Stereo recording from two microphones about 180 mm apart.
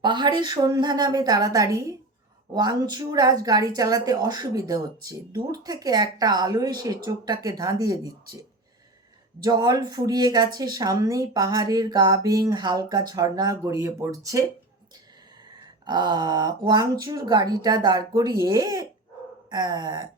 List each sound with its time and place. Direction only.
0.0 s speech: 25° right (ahead or behind)
15.9 s speech: 25° right (ahead or behind)